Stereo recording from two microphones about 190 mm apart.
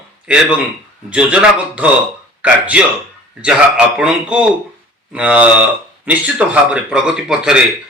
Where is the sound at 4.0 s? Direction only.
5° right (ahead or behind).